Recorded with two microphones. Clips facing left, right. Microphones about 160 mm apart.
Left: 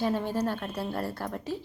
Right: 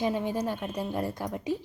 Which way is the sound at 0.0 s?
10° right (ahead or behind).